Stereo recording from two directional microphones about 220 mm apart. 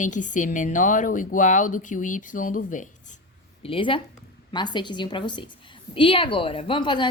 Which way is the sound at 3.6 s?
25° left (ahead or behind).